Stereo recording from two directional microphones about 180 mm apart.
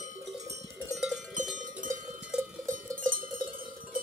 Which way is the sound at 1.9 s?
15° right (ahead or behind).